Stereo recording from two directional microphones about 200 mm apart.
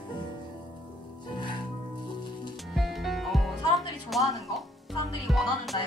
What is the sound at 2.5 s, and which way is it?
Music, centre (ahead or behind).